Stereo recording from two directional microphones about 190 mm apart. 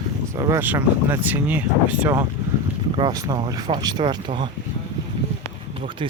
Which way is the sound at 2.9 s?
20° right (ahead or behind).